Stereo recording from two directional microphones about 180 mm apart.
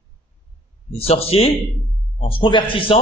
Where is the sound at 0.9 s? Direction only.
35° left (ahead or behind).